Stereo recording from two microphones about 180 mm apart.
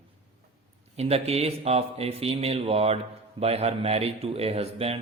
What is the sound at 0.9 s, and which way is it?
A man's voice, 35° right (ahead or behind).